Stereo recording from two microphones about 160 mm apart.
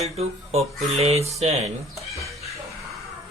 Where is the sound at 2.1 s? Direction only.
Centre (ahead or behind).